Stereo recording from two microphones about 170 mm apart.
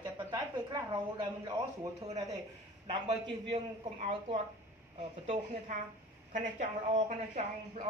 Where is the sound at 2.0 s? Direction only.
40° right (ahead or behind).